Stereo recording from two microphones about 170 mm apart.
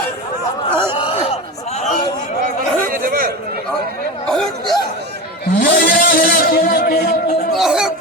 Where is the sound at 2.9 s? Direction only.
55° right (ahead or behind).